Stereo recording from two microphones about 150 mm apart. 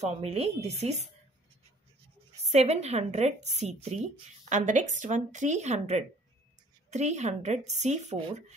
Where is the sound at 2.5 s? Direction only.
50° right (ahead or behind).